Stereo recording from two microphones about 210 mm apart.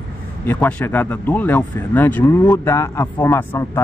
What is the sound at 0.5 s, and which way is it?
Speech, 10° left (ahead or behind).